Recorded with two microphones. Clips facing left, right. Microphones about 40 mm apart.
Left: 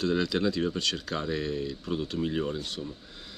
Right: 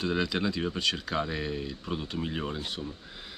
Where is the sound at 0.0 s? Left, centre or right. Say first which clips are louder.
Left 2 dB; centre.